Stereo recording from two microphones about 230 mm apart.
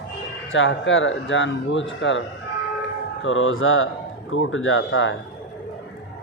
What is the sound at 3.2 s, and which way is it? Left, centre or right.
Speech, left.